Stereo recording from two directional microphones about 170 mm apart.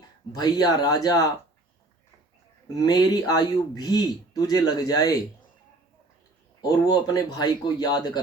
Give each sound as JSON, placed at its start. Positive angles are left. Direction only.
{"t": 0.3, "sound": "a man's voice", "side_deg": 20}
{"t": 2.7, "sound": "a man's voice", "side_deg": 25}
{"t": 6.6, "sound": "a man's voice", "side_deg": 25}